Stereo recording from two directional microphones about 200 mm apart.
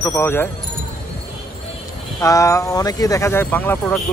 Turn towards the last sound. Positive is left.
turn(degrees=5)  # may be behind; listen again after turning